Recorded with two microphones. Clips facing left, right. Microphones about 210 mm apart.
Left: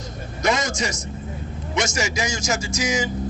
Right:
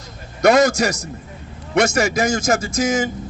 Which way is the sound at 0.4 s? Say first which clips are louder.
Right 9 dB; 65° right (ahead or behind).